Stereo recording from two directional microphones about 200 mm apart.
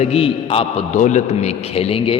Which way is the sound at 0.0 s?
30° left (ahead or behind).